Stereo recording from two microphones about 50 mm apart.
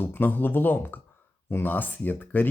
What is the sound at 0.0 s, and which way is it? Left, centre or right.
Speech, left.